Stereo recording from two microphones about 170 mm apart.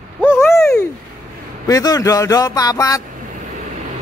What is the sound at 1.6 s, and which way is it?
Speech, 20° left (ahead or behind).